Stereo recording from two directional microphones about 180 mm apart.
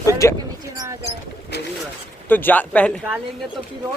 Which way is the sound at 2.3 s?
10° left (ahead or behind).